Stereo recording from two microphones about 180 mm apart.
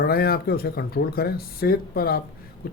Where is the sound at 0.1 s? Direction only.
55° left (ahead or behind).